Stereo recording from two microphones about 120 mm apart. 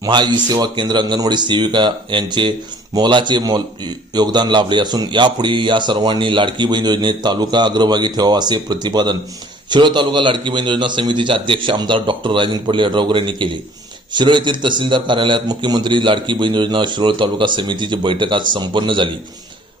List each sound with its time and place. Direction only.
0.0 s a man's voice: 40° right (ahead or behind)